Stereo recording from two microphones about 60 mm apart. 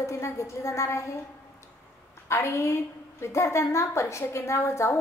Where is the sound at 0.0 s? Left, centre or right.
Left.